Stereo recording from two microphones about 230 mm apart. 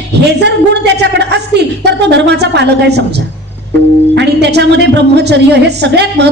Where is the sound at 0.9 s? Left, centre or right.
Right.